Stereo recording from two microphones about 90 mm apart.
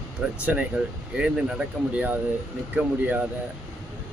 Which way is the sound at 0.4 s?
15° right (ahead or behind).